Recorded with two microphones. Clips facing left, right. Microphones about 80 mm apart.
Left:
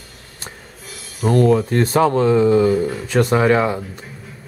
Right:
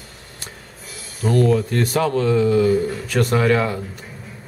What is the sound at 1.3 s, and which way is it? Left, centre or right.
A man's voice, left.